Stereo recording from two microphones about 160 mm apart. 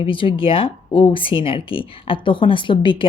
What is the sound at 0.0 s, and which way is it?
Speech, 35° left (ahead or behind).